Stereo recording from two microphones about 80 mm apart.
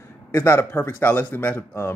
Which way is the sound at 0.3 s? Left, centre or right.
Left.